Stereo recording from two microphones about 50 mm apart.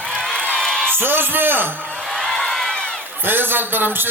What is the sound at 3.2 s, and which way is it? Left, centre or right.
Speech, right.